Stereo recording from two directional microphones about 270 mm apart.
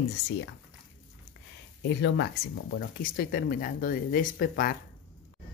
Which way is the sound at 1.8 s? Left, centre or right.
Left.